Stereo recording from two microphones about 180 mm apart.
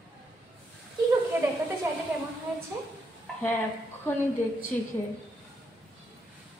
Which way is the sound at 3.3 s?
5° left (ahead or behind).